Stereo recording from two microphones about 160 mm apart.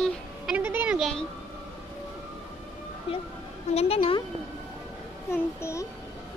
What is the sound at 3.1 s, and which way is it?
A woman's voice, 35° left (ahead or behind).